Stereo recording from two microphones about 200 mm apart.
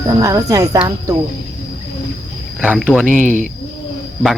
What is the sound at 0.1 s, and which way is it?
Speech, 15° right (ahead or behind).